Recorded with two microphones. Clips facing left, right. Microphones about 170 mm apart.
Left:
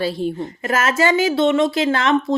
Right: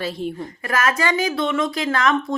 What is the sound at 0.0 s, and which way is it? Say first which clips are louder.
A woman's voice: left 4 dB; 35° left (ahead or behind).